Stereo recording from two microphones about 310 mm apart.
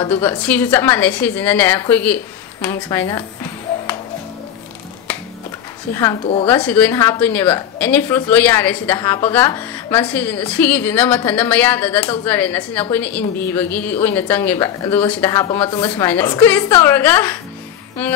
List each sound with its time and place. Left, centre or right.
0.0 s a woman's voice: centre
5.9 s a woman's voice: centre
6.5 s a woman's voice: centre